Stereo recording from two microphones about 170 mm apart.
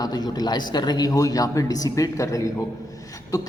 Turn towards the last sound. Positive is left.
turn(degrees=20)  # may be behind; listen again after turning